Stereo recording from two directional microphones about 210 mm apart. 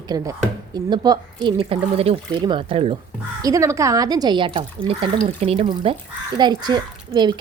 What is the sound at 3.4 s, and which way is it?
A woman's voice, 15° right (ahead or behind).